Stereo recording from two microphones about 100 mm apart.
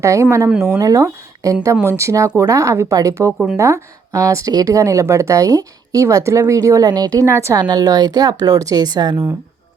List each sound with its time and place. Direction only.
0.0 s speech: 30° right (ahead or behind)
3.3 s speech: 5° right (ahead or behind)
3.6 s speech: 30° right (ahead or behind)